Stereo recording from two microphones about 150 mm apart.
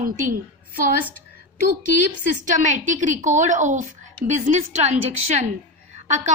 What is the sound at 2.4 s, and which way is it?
A woman's voice, 55° right (ahead or behind).